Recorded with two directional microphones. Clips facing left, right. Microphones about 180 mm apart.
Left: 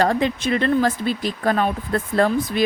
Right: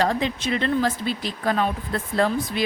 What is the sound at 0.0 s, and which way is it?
Speech, 55° left (ahead or behind).